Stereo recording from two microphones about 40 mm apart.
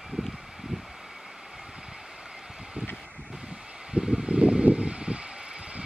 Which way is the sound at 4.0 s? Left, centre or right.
Centre.